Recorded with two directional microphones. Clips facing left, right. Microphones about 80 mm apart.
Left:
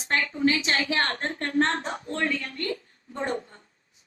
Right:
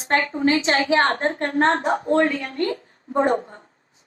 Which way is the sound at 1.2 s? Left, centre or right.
Right.